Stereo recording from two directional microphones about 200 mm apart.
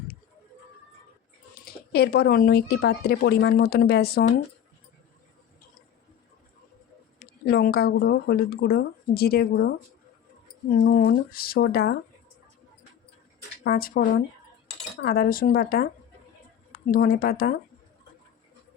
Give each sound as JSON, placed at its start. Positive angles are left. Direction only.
{"t": 1.6, "sound": "speech", "side_deg": 55}
{"t": 7.2, "sound": "speech", "side_deg": 50}
{"t": 10.8, "sound": "speech", "side_deg": 50}
{"t": 13.7, "sound": "speech", "side_deg": 50}